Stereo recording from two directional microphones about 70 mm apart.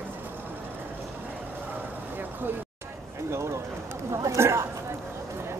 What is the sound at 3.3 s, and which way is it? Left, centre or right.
Bird, right.